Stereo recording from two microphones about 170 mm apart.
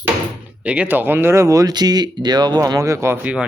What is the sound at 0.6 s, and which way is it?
Speech, 5° right (ahead or behind).